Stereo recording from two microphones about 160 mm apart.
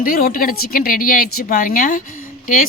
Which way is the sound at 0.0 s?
65° left (ahead or behind).